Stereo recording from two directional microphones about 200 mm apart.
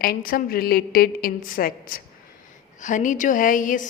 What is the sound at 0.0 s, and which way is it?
A woman's voice, 45° left (ahead or behind).